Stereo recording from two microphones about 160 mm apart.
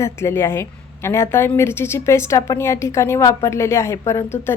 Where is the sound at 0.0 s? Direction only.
15° left (ahead or behind).